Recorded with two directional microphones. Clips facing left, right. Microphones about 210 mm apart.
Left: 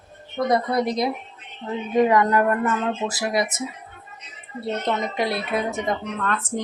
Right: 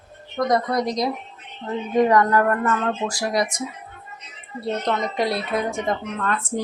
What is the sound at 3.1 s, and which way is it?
Speech, 5° left (ahead or behind).